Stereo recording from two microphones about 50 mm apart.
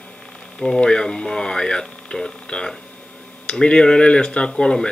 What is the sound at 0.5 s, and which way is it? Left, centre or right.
Speech, centre.